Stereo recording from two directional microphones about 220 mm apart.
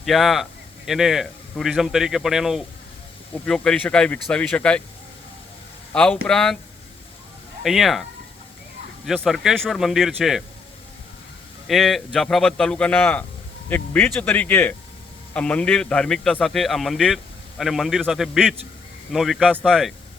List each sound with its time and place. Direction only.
0.0 s a man's voice: centre (ahead or behind)
5.9 s a man's voice: 5° left (ahead or behind)
7.6 s a man's voice: centre (ahead or behind)
9.0 s a man's voice: centre (ahead or behind)
11.7 s a man's voice: centre (ahead or behind)